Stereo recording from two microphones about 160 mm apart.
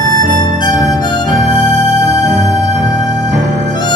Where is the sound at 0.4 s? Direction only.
30° left (ahead or behind).